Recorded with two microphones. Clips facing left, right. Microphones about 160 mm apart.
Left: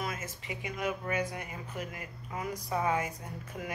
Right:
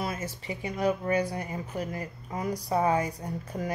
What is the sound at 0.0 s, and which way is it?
Speech, 35° right (ahead or behind).